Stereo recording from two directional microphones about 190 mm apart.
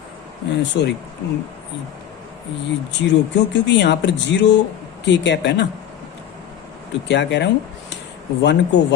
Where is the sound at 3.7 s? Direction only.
65° left (ahead or behind).